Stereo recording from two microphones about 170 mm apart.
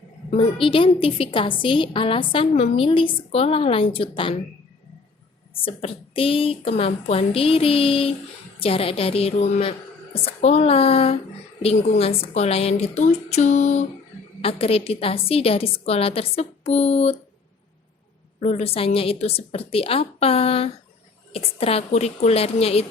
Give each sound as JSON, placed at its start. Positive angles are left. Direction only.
{"t": 0.3, "sound": "a woman's voice", "side_deg": 30}
{"t": 5.6, "sound": "a woman's voice", "side_deg": 35}
{"t": 18.3, "sound": "a woman's voice", "side_deg": 40}